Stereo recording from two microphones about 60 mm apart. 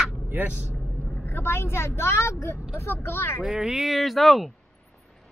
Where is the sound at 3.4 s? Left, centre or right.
Centre.